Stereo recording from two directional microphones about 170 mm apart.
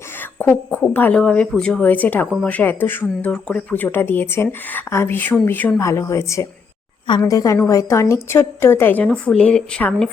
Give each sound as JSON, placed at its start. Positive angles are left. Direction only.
{"t": 0.2, "sound": "speech", "side_deg": 10}